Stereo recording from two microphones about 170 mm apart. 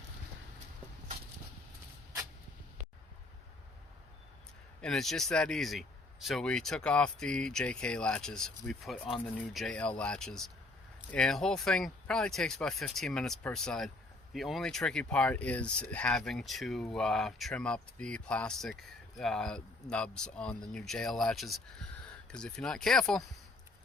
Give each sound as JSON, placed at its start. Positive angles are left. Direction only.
{"t": 4.8, "sound": "speech", "side_deg": 0}